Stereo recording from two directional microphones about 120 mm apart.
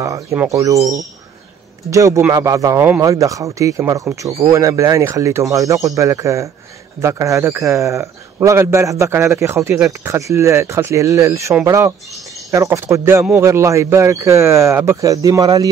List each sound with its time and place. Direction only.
0.0 s speech: 25° right (ahead or behind)